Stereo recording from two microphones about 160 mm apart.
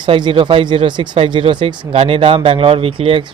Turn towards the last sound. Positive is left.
turn(degrees=-35)  # may be behind; listen again after turning